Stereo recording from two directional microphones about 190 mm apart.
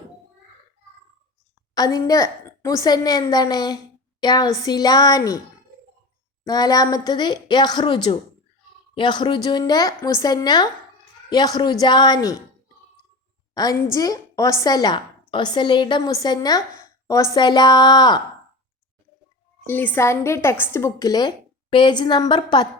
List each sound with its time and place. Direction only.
1.7 s a woman's voice: 20° left (ahead or behind)
6.4 s a woman's voice: 20° left (ahead or behind)
13.5 s a woman's voice: 20° left (ahead or behind)
19.6 s a woman's voice: 10° left (ahead or behind)